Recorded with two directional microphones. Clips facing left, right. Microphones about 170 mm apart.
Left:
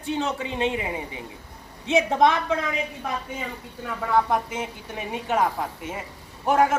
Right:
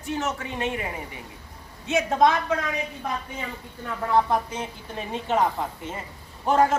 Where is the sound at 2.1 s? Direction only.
20° left (ahead or behind).